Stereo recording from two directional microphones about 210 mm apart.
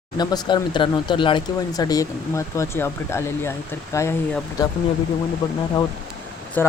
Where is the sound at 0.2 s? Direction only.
20° left (ahead or behind).